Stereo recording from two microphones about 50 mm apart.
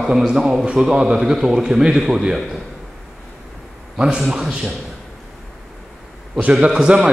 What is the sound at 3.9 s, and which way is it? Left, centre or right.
Speech, centre.